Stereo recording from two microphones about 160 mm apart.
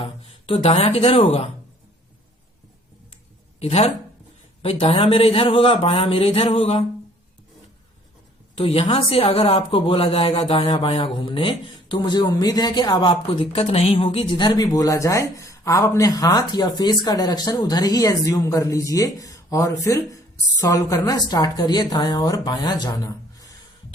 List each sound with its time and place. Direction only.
0.0 s speech: 35° left (ahead or behind)
3.6 s a man's voice: 40° left (ahead or behind)
8.5 s a man's voice: 35° left (ahead or behind)